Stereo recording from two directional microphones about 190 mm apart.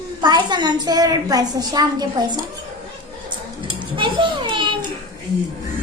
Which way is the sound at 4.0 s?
25° right (ahead or behind).